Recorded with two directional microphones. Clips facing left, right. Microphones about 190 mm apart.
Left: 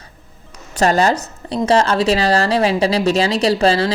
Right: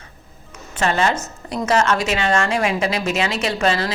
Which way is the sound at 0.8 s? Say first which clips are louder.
Left 5 dB; 40° left (ahead or behind).